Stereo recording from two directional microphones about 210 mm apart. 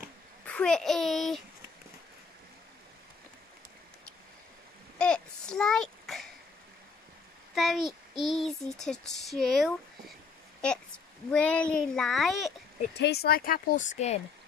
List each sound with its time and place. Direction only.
0.5 s a child's voice: 5° left (ahead or behind)
4.9 s a sound: 5° left (ahead or behind)
7.5 s speech: centre (ahead or behind)
11.2 s speech: 5° left (ahead or behind)
12.9 s speech: 50° left (ahead or behind); by 14.2 s 30° left (ahead or behind)